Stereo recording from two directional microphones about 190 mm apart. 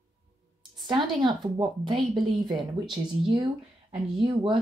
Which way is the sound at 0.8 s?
25° right (ahead or behind).